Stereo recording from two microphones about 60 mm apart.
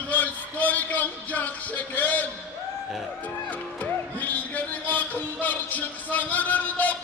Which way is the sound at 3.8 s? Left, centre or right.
Left.